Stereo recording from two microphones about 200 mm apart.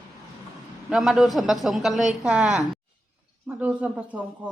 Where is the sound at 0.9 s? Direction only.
5° right (ahead or behind).